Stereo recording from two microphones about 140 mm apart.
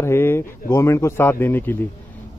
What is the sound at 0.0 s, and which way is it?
Speech, 15° left (ahead or behind).